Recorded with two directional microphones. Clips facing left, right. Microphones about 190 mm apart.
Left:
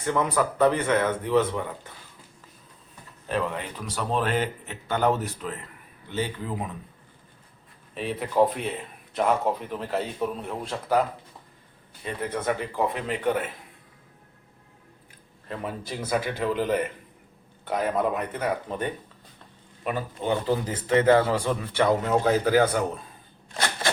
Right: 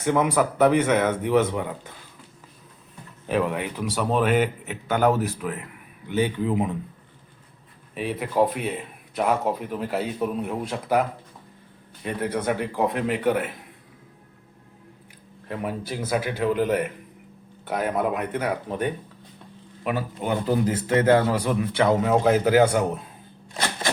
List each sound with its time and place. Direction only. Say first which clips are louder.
0.0 s speech: right 3 dB; 15° right (ahead or behind)
3.2 s speech: right 4 dB; 10° right (ahead or behind)
7.9 s speech: even; 5° right (ahead or behind)
12.0 s a man's voice: right 3 dB; 5° right (ahead or behind)
15.4 s a man's voice: right 3 dB; 10° right (ahead or behind)
21.3 s speech: right 2 dB; 15° right (ahead or behind)